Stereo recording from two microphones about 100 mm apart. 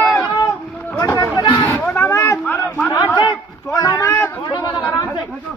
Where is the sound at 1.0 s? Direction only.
35° left (ahead or behind).